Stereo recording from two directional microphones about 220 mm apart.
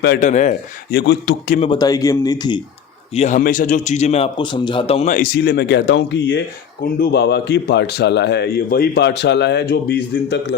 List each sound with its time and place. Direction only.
0.2 s speech: 35° left (ahead or behind)
0.9 s speech: 50° left (ahead or behind)
1.5 s a man's voice: 25° left (ahead or behind)
3.2 s a man's voice: 35° left (ahead or behind); by 10.6 s 50° left (ahead or behind)